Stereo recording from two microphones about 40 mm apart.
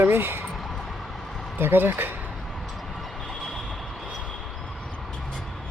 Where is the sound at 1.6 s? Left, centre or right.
Right.